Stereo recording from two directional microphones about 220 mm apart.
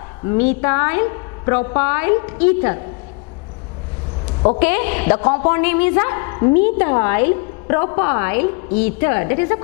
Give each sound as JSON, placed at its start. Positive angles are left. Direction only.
{"t": 0.3, "sound": "a woman's voice", "side_deg": 15}
{"t": 4.6, "sound": "a woman's voice", "side_deg": 10}